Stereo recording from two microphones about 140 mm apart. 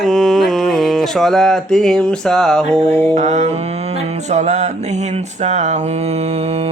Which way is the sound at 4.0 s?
55° right (ahead or behind).